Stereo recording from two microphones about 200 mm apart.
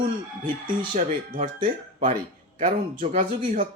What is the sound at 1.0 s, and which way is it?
Speech, 40° right (ahead or behind).